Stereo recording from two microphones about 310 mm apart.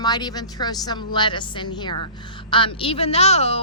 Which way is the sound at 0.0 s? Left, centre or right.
Centre.